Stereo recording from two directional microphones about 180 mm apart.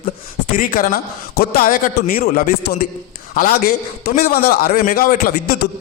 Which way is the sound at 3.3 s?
50° left (ahead or behind).